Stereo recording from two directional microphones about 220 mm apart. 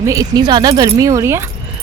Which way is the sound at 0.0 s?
15° right (ahead or behind).